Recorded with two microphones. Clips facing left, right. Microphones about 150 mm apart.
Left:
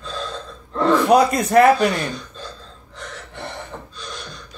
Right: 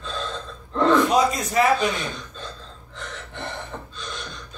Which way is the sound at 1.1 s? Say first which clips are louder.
Left 6 dB; 60° left (ahead or behind).